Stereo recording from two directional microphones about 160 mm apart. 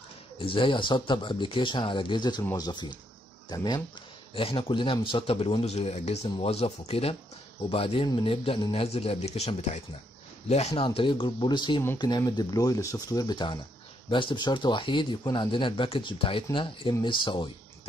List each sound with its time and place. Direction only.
0.4 s speech: 30° left (ahead or behind)